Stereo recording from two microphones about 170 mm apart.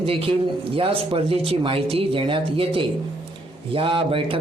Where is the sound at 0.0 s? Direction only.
35° right (ahead or behind).